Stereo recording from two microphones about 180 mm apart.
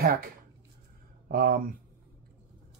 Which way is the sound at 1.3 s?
50° right (ahead or behind).